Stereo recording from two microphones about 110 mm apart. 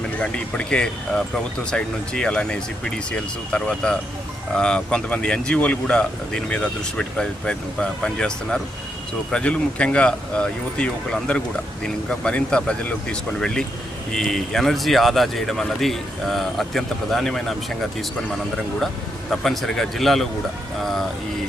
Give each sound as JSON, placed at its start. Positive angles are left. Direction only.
{"t": 0.2, "sound": "speech", "side_deg": 10}
{"t": 19.3, "sound": "speech", "side_deg": 0}